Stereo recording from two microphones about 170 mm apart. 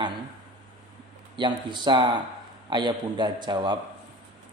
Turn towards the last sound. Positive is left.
turn(degrees=-25)  # may be behind; listen again after turning